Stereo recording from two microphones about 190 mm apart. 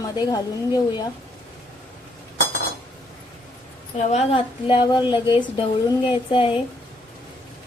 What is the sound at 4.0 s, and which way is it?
Speech, 35° left (ahead or behind).